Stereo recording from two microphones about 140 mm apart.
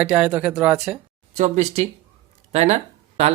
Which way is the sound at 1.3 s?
55° right (ahead or behind).